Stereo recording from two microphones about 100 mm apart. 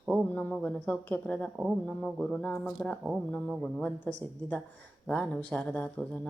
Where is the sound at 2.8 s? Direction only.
15° left (ahead or behind).